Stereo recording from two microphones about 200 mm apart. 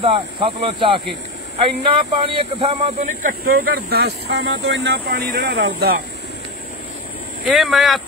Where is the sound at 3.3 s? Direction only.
50° right (ahead or behind).